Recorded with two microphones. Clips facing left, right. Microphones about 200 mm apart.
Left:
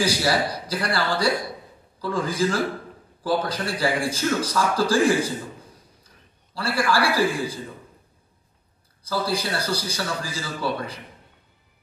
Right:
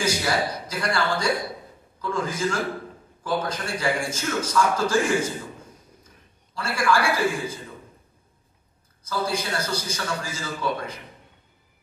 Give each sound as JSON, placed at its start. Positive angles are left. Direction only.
{"t": 0.0, "sound": "a man's voice", "side_deg": 35}
{"t": 9.0, "sound": "a man's voice", "side_deg": 35}